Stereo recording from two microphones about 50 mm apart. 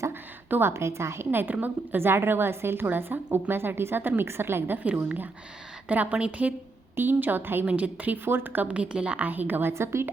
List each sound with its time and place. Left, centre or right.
0.1 s a sound: right
0.7 s a woman's voice: right
2.0 s a woman's voice: right
4.8 s a woman's voice: right
6.9 s a woman's voice: right
7.7 s a woman's voice: right
8.6 s a woman's voice: right
9.7 s a woman's voice: right